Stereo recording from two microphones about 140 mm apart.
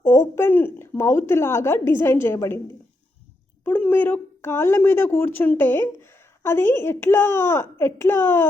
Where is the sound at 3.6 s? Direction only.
10° left (ahead or behind).